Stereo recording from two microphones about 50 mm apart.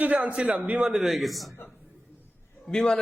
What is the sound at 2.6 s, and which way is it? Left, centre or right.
Speech, centre.